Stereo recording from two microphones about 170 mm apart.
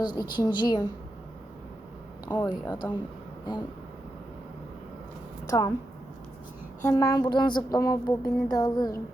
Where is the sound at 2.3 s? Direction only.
25° left (ahead or behind).